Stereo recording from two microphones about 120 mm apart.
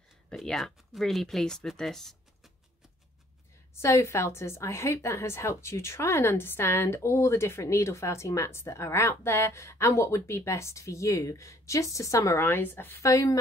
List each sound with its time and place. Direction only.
0.3 s speech: 5° left (ahead or behind)
3.7 s a woman's voice: 20° left (ahead or behind)